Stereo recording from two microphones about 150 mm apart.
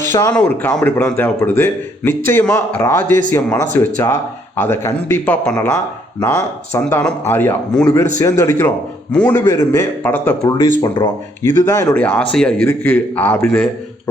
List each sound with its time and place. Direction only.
0.1 s speech: 25° left (ahead or behind)
0.3 s speech: 10° left (ahead or behind)
6.7 s speech: 15° left (ahead or behind)